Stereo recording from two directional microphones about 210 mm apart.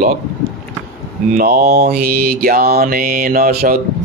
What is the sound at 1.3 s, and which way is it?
Mantra, 45° right (ahead or behind).